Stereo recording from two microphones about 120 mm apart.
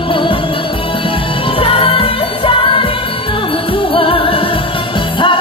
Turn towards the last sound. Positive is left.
turn(degrees=50)  # may be behind; listen again after turning